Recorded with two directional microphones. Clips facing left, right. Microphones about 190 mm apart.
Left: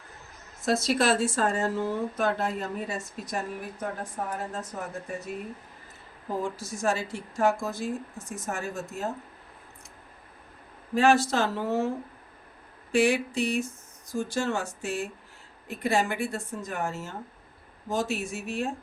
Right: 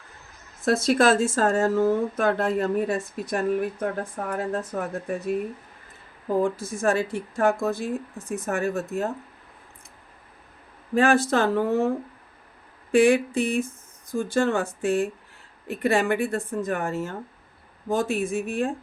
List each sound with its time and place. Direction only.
0.6 s speech: 55° right (ahead or behind)
6.4 s speech: 55° right (ahead or behind)
10.9 s speech: 55° right (ahead or behind)